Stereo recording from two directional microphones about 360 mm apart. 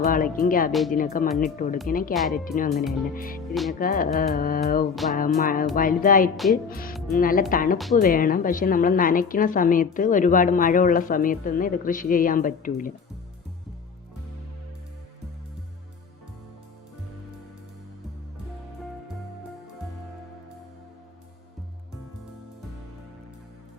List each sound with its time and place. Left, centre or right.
0.0 s a woman's voice: left
6.3 s speech: centre
6.7 s a woman's voice: left